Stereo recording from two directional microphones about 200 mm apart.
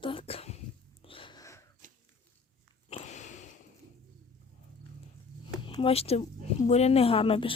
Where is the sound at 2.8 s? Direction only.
35° left (ahead or behind).